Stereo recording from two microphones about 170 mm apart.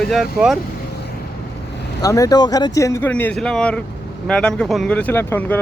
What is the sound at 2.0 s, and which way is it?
Speech, 20° left (ahead or behind).